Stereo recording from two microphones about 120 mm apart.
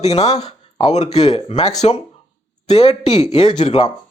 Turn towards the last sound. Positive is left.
turn(degrees=65)  # may be behind; listen again after turning